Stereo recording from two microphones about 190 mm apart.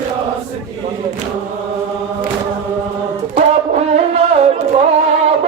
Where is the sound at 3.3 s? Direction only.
35° right (ahead or behind).